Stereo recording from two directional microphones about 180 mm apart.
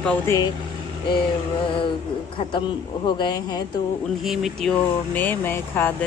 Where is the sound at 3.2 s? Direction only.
20° left (ahead or behind).